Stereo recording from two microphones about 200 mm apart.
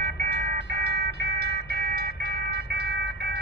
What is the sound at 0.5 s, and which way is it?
Music, 50° right (ahead or behind).